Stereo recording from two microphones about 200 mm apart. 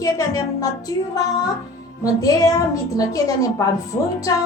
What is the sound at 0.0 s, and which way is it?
A woman's voice, 15° left (ahead or behind).